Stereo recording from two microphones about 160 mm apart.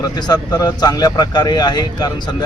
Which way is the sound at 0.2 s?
25° left (ahead or behind).